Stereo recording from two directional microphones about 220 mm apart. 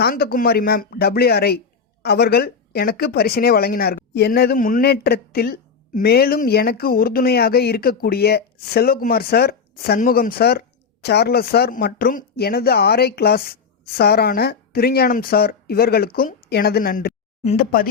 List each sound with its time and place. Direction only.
0.0 s speech: 45° left (ahead or behind)
17.4 s speech: 30° left (ahead or behind)